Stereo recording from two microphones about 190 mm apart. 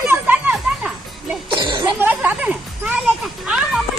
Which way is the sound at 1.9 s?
10° right (ahead or behind).